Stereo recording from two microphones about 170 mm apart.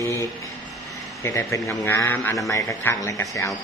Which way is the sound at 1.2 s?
15° left (ahead or behind).